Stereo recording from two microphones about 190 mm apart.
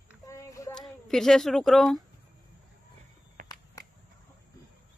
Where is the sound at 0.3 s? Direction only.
15° left (ahead or behind).